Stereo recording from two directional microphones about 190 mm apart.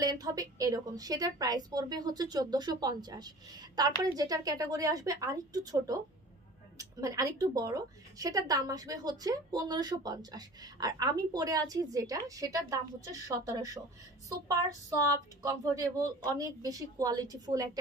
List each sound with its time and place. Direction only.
0.0 s speech: 20° right (ahead or behind)